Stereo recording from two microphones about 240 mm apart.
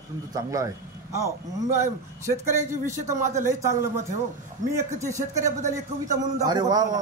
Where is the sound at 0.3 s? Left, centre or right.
Centre.